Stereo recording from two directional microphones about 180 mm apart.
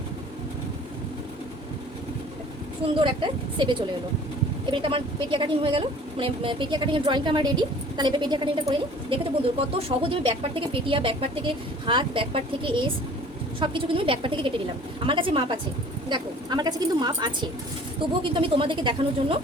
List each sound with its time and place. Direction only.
2.8 s speech: 25° right (ahead or behind)